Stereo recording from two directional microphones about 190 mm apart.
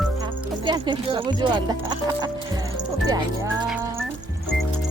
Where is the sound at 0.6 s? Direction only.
25° right (ahead or behind).